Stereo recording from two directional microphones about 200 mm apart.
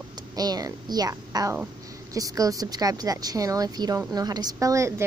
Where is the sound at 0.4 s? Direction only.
20° right (ahead or behind).